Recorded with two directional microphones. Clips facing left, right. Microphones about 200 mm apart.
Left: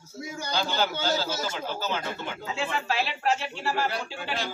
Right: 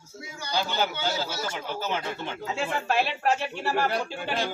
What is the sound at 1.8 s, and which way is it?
Speech, 25° right (ahead or behind).